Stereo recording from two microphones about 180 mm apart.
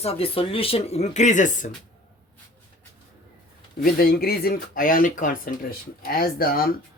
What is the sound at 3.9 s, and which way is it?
Speech, 55° left (ahead or behind).